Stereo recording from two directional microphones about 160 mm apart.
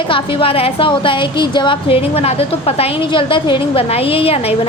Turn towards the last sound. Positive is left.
turn(degrees=40)  # may be behind; listen again after turning